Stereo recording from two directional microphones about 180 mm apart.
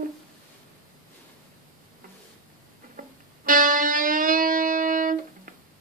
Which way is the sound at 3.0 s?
50° right (ahead or behind).